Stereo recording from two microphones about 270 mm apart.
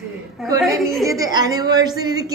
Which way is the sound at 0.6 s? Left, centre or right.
Centre.